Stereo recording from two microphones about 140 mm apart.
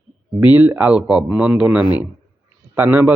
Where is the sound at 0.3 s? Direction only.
15° right (ahead or behind).